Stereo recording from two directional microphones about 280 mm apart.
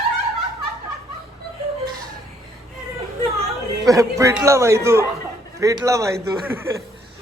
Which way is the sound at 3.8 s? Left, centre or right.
Centre.